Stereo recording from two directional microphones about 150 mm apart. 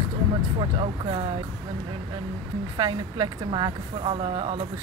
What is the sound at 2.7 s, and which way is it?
Speech, 30° right (ahead or behind).